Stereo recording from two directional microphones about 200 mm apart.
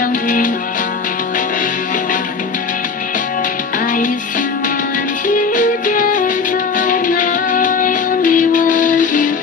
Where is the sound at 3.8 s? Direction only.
40° left (ahead or behind).